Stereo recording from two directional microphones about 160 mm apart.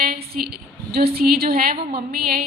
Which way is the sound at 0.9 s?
75° right (ahead or behind).